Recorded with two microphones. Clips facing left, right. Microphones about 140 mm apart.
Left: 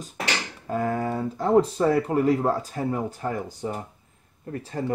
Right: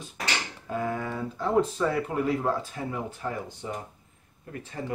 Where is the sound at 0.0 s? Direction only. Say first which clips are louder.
Left 3 dB; 40° left (ahead or behind).